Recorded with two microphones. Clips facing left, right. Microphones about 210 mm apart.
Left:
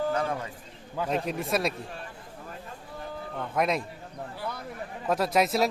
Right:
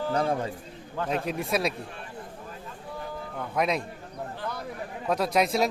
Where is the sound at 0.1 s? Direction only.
35° right (ahead or behind).